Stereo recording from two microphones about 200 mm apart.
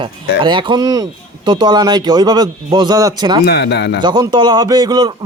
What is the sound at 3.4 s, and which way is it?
Speech, 55° left (ahead or behind).